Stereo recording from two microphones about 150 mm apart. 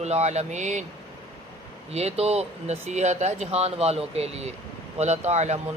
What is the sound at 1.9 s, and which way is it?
Speech, 45° right (ahead or behind).